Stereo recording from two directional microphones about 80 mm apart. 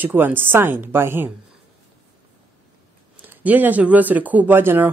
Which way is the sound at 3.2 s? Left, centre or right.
Right.